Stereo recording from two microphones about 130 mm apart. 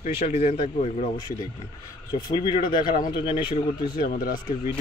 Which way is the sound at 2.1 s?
35° left (ahead or behind).